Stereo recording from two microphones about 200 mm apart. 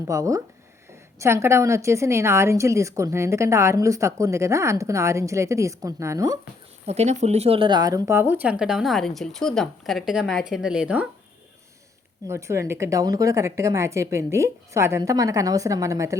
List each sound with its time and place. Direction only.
0.1 s a woman's voice: 15° right (ahead or behind)
6.8 s speech: 35° right (ahead or behind); by 11.1 s 5° right (ahead or behind)
12.3 s a woman's voice: 15° right (ahead or behind)